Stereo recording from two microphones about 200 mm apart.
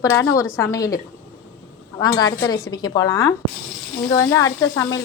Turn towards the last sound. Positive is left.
turn(degrees=15)  # may be behind; listen again after turning